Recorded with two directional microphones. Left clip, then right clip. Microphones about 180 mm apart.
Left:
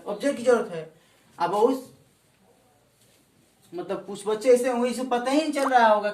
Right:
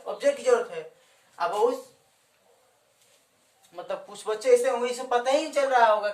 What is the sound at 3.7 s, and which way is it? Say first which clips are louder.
Speech: left 2 dB; 25° right (ahead or behind).